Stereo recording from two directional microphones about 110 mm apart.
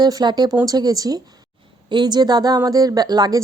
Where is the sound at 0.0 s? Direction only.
40° right (ahead or behind).